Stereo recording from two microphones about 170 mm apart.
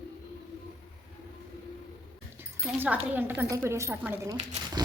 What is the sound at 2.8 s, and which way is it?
A woman's voice, 10° right (ahead or behind).